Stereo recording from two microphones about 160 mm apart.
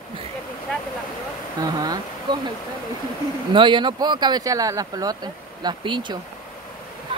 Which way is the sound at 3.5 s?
30° right (ahead or behind).